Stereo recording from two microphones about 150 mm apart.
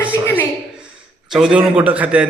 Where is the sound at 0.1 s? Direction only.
20° left (ahead or behind).